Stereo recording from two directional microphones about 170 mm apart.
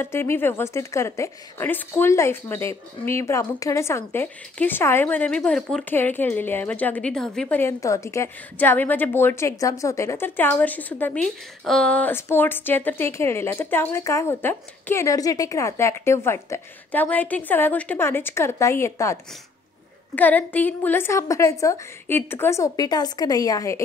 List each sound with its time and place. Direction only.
0.0 s a woman's voice: 15° left (ahead or behind)
20.2 s a woman's voice: 10° left (ahead or behind)